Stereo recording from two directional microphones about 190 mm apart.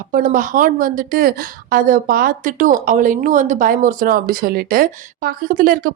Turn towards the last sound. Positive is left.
turn(degrees=-50)  # may be behind; listen again after turning